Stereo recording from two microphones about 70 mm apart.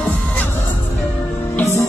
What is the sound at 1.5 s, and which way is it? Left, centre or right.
Music, left.